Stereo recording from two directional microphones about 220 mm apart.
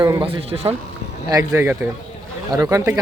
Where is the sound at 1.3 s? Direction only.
15° right (ahead or behind).